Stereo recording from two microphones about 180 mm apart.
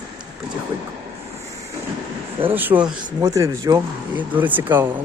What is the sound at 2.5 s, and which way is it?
Speech, 10° right (ahead or behind).